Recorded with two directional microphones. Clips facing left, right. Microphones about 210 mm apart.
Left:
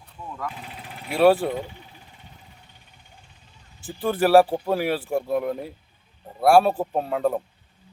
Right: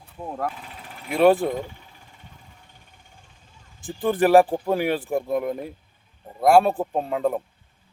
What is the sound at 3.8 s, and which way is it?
Speech, 5° left (ahead or behind).